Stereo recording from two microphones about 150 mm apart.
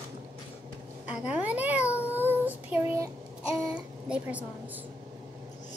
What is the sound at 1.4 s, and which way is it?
Speech, 10° right (ahead or behind).